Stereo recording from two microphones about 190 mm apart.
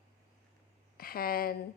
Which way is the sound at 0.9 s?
50° left (ahead or behind).